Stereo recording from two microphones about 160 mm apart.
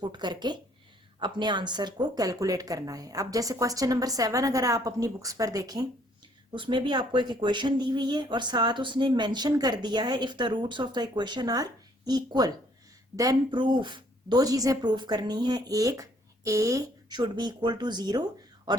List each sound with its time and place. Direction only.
0.0 s speech: 25° right (ahead or behind)